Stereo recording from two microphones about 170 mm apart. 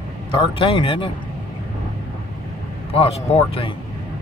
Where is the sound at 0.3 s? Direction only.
30° left (ahead or behind).